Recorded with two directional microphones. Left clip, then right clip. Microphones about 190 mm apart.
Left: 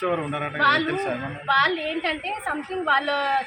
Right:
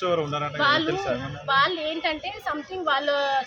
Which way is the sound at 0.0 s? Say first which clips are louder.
Right 1 dB; 45° right (ahead or behind).